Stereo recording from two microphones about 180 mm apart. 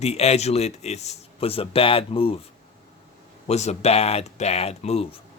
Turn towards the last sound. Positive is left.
turn(degrees=35)  # may be behind; listen again after turning